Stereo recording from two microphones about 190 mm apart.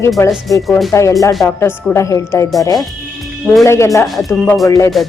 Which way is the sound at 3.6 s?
15° left (ahead or behind).